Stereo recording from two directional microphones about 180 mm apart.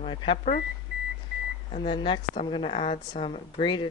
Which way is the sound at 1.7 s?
30° left (ahead or behind).